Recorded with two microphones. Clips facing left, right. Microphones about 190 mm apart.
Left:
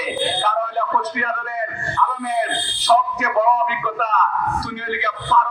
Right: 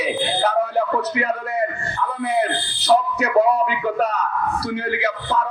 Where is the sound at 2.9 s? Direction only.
40° right (ahead or behind).